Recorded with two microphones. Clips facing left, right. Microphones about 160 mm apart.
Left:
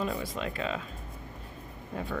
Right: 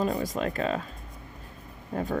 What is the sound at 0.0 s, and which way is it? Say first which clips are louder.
Speech: right 5 dB; 40° right (ahead or behind).